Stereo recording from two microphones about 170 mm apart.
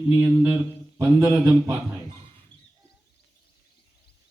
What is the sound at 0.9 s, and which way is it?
Speech, 15° right (ahead or behind).